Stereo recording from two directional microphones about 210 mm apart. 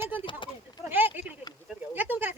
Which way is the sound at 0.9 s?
10° right (ahead or behind).